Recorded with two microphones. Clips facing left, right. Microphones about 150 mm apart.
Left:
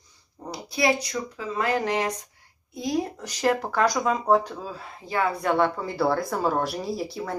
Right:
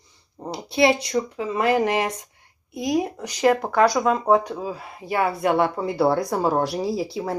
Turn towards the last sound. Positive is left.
turn(degrees=-25)  # may be behind; listen again after turning